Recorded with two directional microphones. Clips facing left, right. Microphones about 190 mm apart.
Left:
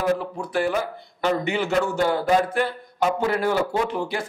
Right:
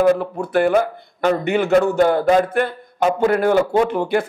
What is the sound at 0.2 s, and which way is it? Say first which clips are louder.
A man's voice: right 7 dB; 55° right (ahead or behind).